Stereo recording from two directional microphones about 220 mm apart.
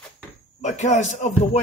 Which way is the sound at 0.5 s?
30° left (ahead or behind).